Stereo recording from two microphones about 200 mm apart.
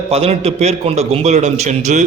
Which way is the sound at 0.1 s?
30° right (ahead or behind).